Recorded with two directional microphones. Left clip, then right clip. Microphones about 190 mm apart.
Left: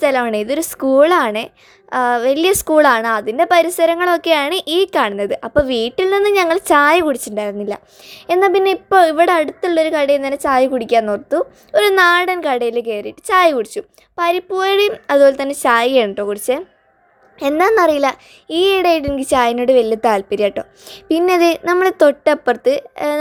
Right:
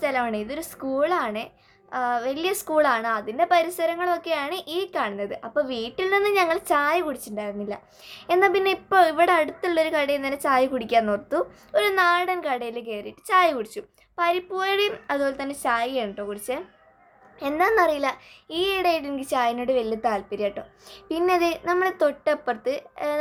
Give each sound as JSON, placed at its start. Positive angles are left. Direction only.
{"t": 0.0, "sound": "a woman's voice", "side_deg": 35}